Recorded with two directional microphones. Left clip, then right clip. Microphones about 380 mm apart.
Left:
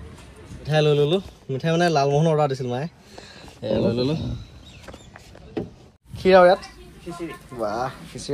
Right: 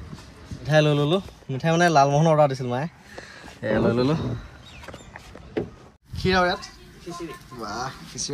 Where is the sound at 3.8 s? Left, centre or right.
Centre.